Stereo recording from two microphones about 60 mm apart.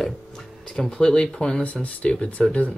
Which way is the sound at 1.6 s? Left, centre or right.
Left.